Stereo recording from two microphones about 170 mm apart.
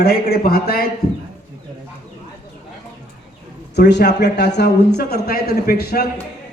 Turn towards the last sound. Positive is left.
turn(degrees=70)  # may be behind; listen again after turning